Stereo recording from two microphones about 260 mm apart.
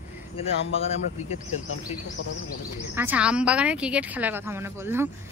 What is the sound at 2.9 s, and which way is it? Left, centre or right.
A woman's voice, centre.